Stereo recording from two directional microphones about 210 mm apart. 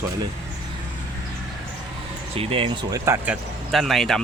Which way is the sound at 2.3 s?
25° right (ahead or behind).